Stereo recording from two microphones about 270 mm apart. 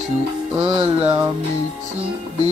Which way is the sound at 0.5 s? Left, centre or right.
Right.